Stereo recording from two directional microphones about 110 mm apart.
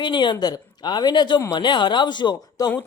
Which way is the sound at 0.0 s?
45° left (ahead or behind).